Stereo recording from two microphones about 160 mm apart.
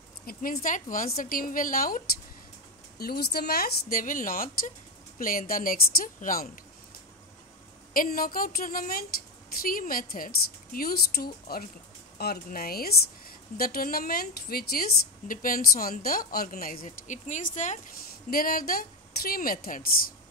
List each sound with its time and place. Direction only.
0.3 s a woman's voice: 65° left (ahead or behind)
3.0 s a woman's voice: 80° left; by 6.6 s 60° left (ahead or behind)
7.9 s a woman's voice: 65° left (ahead or behind)
18.3 s a woman's voice: 65° left (ahead or behind)